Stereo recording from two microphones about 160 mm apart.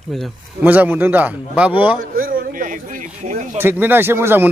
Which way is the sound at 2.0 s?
60° right (ahead or behind).